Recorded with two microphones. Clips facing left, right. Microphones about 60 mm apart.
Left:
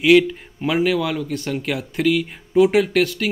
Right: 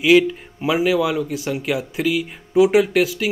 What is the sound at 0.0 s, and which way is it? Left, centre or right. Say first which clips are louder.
Speech: even; centre.